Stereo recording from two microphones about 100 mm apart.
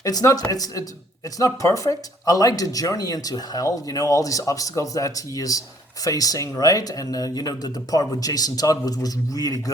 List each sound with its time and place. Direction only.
0.0 s speech: 40° left (ahead or behind)